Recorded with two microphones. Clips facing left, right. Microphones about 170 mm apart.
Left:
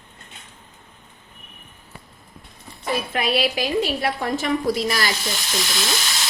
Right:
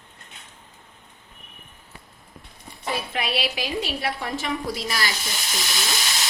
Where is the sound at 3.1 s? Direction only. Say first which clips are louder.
Left 7 dB; 45° left (ahead or behind).